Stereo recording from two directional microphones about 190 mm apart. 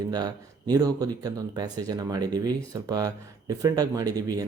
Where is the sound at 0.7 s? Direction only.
20° right (ahead or behind).